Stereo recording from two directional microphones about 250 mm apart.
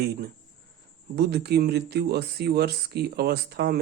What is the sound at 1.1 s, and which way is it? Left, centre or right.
Speech, right.